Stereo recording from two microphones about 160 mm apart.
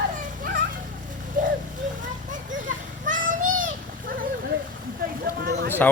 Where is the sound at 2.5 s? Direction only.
55° right (ahead or behind).